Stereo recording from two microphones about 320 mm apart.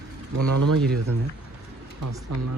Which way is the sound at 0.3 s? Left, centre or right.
Right.